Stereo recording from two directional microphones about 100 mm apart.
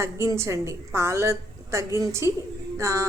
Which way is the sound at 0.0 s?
30° right (ahead or behind).